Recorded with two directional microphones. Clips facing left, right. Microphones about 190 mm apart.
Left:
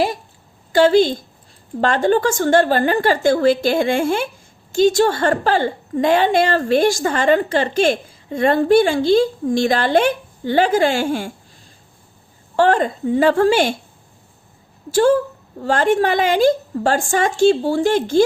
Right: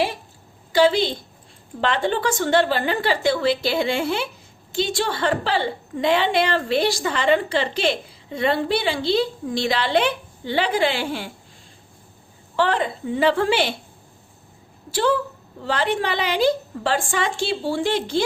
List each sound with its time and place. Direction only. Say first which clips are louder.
0.7 s a woman's voice: left 5 dB; 45° left (ahead or behind)
12.5 s a woman's voice: left 6 dB; 45° left (ahead or behind)
14.8 s a woman's voice: left 7 dB; 45° left (ahead or behind)